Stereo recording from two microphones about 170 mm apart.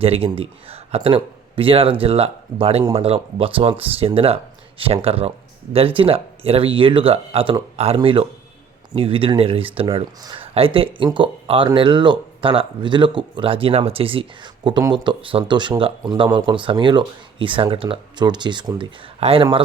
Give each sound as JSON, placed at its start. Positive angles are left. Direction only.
{"t": 0.0, "sound": "speech", "side_deg": -35}